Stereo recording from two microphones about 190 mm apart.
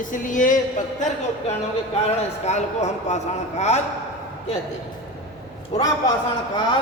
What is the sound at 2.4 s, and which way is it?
Speech, 35° left (ahead or behind).